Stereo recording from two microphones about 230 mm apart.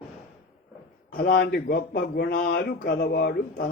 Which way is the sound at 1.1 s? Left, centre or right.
Left.